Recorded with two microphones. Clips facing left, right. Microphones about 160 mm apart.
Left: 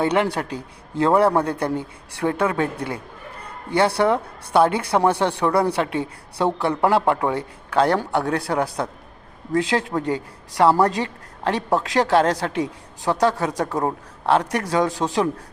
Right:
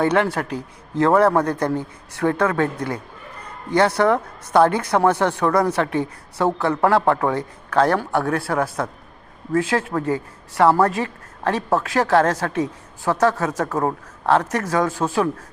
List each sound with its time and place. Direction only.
0.0 s a woman's voice: 15° left (ahead or behind)
11.4 s a woman's voice: 15° left (ahead or behind)